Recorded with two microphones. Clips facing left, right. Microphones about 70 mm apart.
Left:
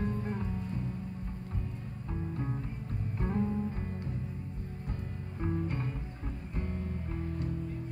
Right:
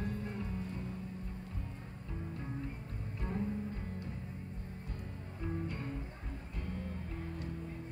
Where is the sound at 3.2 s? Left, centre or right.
Left.